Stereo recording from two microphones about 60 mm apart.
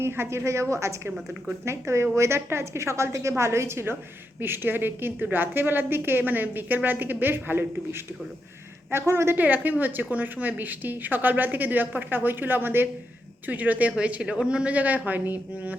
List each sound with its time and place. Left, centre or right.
0.0 s a woman's voice: right
8.9 s a woman's voice: right
9.4 s a woman's voice: right